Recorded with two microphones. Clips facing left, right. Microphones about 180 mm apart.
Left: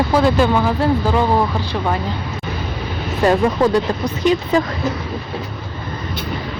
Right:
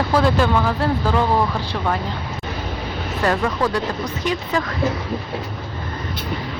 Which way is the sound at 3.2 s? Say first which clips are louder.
Left 6 dB; 20° left (ahead or behind).